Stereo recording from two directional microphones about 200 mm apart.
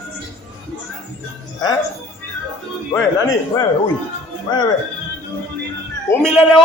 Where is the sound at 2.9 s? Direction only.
15° left (ahead or behind).